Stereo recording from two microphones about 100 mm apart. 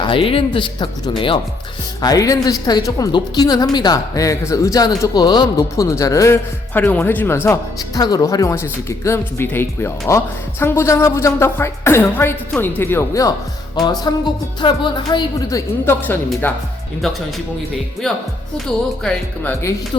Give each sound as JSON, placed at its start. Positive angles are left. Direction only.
{"t": 0.0, "sound": "speech", "side_deg": 60}
{"t": 2.0, "sound": "speech", "side_deg": 40}
{"t": 5.7, "sound": "speech", "side_deg": 30}
{"t": 7.8, "sound": "speech", "side_deg": 40}
{"t": 14.1, "sound": "a woman's voice", "side_deg": 40}
{"t": 15.4, "sound": "speech", "side_deg": 35}
{"t": 16.0, "sound": "speech", "side_deg": 20}
{"t": 18.7, "sound": "speech", "side_deg": 5}